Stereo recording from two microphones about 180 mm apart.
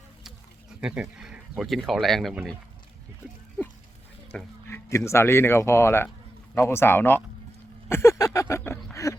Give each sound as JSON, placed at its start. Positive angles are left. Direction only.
{"t": 0.8, "sound": "speech", "side_deg": -5}
{"t": 4.3, "sound": "speech", "side_deg": 10}
{"t": 7.9, "sound": "a sound", "side_deg": 15}